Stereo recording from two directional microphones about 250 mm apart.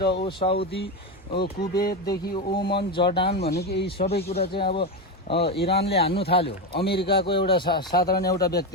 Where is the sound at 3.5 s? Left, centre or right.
Left.